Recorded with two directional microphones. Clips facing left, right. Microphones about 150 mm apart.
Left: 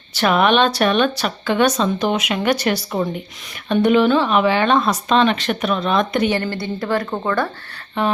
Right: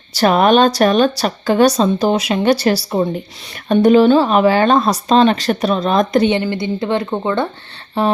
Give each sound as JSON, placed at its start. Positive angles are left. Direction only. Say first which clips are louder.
{"t": 0.1, "sound": "speech", "louder": "right 4 dB", "side_deg": -35}
{"t": 6.4, "sound": "speech", "louder": "right 4 dB", "side_deg": -20}
{"t": 8.0, "sound": "speech", "louder": "right 4 dB", "side_deg": -35}